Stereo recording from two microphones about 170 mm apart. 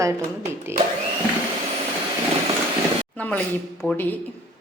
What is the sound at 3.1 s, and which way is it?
Speech, 10° left (ahead or behind).